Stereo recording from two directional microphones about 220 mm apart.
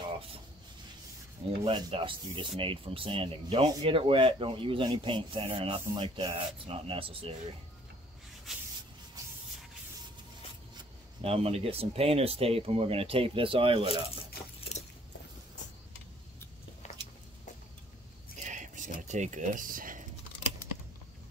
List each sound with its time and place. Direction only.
1.6 s speech: 25° right (ahead or behind)
8.5 s spray: centre (ahead or behind)
11.2 s speech: 25° right (ahead or behind)
18.4 s a sound: 35° right (ahead or behind)
18.9 s speech: 35° right (ahead or behind)